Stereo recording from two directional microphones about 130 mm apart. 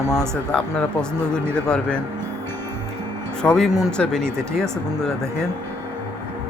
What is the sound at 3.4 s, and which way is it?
Speech, 5° left (ahead or behind).